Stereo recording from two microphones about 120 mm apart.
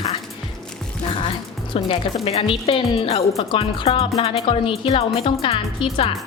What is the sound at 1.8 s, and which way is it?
Speech, 55° left (ahead or behind).